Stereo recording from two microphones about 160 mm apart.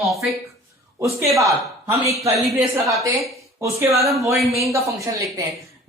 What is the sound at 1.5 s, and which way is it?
A woman's voice, 20° right (ahead or behind).